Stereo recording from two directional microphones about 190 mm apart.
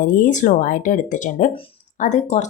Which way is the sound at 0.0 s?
45° left (ahead or behind).